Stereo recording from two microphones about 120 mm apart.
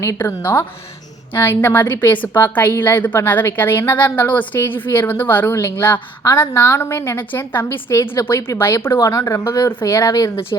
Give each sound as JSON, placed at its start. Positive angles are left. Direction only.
{"t": 0.0, "sound": "a woman's voice", "side_deg": 25}